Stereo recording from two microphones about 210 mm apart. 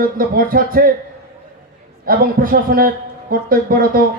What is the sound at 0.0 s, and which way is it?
Speech, 45° right (ahead or behind).